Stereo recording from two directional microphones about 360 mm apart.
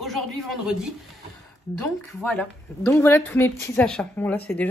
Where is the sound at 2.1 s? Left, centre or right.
Centre.